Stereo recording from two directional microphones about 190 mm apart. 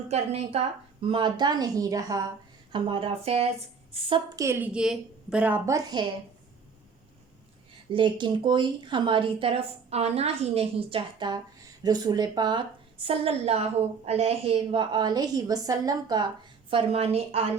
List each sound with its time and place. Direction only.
0.1 s a woman's voice: 35° right (ahead or behind)
4.4 s a woman's voice: 15° right (ahead or behind)
7.9 s a woman's voice: 25° right (ahead or behind)